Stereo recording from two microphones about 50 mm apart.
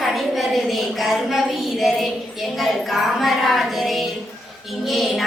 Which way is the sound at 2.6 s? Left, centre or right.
Centre.